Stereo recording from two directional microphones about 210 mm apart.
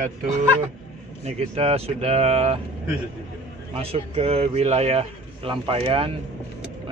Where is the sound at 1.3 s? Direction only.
30° right (ahead or behind).